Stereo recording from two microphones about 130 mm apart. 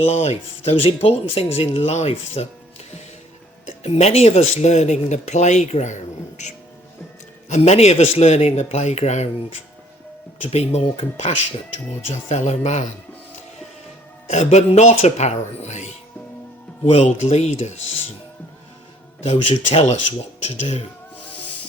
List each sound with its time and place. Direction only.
0.0 s speech: 55° left (ahead or behind)
3.8 s speech: 55° left (ahead or behind)
7.5 s speech: 60° left (ahead or behind)
10.4 s speech: 55° left (ahead or behind)
14.3 s speech: 60° left (ahead or behind)
16.8 s speech: 55° left (ahead or behind)
19.2 s speech: 60° left (ahead or behind)